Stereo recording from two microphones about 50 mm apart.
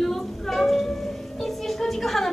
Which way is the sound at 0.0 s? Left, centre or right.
Centre.